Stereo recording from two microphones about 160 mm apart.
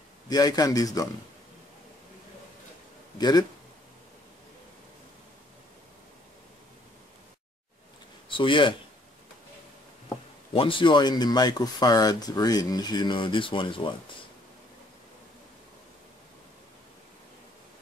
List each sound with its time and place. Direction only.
0.3 s speech: 25° left (ahead or behind)
3.2 s speech: 25° left (ahead or behind)
8.3 s speech: 30° left (ahead or behind)
10.5 s speech: 35° left (ahead or behind)